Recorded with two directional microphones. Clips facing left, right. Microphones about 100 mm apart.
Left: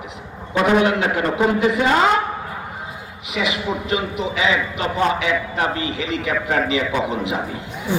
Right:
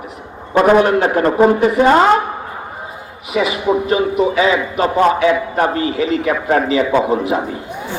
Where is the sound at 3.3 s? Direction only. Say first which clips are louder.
Right 7 dB; 35° right (ahead or behind).